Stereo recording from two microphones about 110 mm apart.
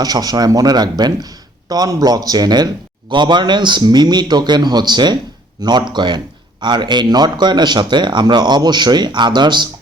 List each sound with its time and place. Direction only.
0.0 s speech: 35° right (ahead or behind)